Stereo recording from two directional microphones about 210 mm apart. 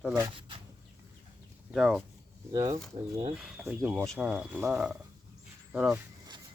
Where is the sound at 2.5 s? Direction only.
15° right (ahead or behind).